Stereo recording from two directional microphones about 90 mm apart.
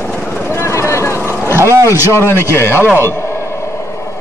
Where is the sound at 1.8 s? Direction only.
30° left (ahead or behind).